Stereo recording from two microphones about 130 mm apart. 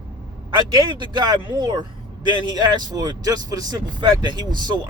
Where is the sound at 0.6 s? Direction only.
35° right (ahead or behind).